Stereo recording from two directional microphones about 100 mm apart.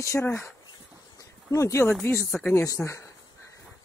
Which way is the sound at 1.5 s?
30° left (ahead or behind).